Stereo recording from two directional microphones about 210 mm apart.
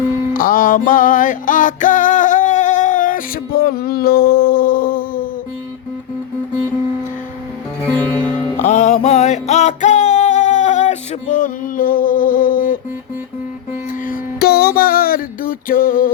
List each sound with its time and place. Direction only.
0.3 s music: 40° left (ahead or behind)
7.9 s music: 5° left (ahead or behind)
8.6 s music: 35° left (ahead or behind)
14.1 s music: 50° left (ahead or behind)